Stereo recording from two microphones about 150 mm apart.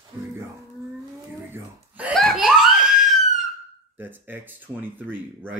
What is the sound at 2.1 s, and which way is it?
Belly laugh, centre (ahead or behind).